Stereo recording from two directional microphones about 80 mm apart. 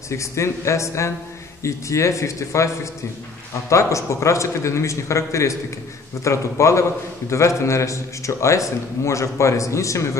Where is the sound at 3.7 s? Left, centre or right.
Left.